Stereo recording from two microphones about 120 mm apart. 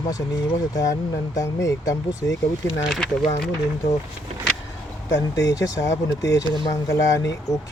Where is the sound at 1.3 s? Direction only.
30° left (ahead or behind).